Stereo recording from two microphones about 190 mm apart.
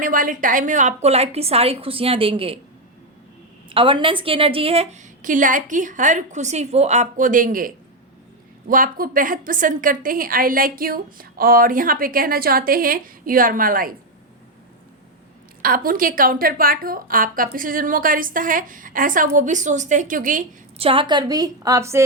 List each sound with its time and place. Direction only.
0.0 s a woman's voice: 45° right (ahead or behind); by 2.6 s 30° right (ahead or behind)
3.7 s a woman's voice: 25° right (ahead or behind); by 13.9 s 50° right (ahead or behind)
15.6 s a woman's voice: 50° right (ahead or behind)
20.7 s a woman's voice: 30° right (ahead or behind)